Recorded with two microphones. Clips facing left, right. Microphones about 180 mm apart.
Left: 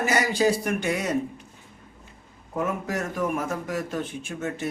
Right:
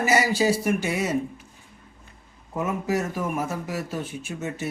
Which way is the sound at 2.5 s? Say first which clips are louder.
Right 2 dB; 5° right (ahead or behind).